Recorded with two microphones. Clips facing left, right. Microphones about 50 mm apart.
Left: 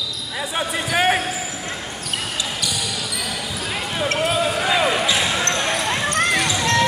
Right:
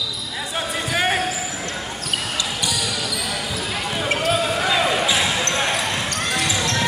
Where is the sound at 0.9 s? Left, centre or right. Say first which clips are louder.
Left 3 dB; centre.